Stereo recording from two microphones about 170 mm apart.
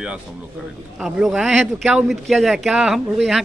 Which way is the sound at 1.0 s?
Centre (ahead or behind).